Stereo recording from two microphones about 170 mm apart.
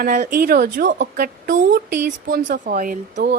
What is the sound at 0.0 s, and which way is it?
Speech, 55° right (ahead or behind).